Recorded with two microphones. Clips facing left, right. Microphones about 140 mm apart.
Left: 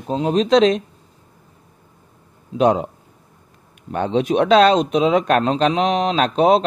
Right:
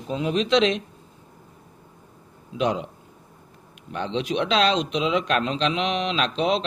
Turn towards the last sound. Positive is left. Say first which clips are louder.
# left 8 dB
turn(degrees=50)  # may be behind; listen again after turning